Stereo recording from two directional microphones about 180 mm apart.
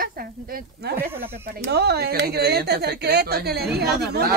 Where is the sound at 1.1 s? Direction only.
60° right (ahead or behind).